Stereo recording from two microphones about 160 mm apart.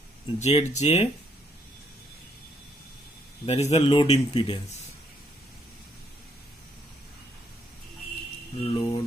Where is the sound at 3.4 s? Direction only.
45° left (ahead or behind).